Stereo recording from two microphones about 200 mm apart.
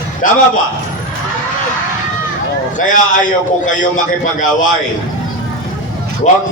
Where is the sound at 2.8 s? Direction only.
40° left (ahead or behind).